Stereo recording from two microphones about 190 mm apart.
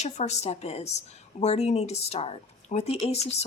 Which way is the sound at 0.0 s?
35° left (ahead or behind).